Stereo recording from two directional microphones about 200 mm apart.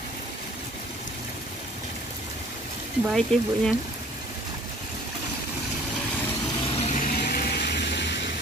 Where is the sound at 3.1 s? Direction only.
5° left (ahead or behind).